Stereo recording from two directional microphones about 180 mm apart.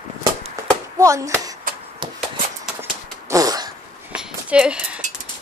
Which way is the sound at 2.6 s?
15° right (ahead or behind).